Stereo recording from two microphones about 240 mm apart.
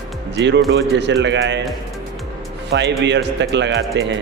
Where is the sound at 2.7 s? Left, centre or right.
Right.